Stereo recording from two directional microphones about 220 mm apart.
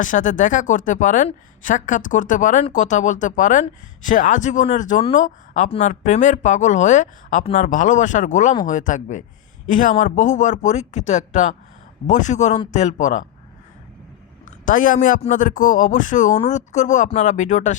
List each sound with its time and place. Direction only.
0.0 s speech: 35° left (ahead or behind)
14.6 s speech: 35° left (ahead or behind)